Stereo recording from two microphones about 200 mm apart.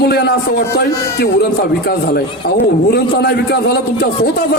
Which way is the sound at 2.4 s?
50° left (ahead or behind).